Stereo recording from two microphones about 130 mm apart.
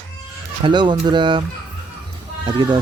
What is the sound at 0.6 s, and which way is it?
Speech, 35° right (ahead or behind).